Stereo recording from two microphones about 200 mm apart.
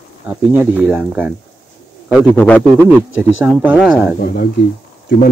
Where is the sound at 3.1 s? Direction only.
10° right (ahead or behind).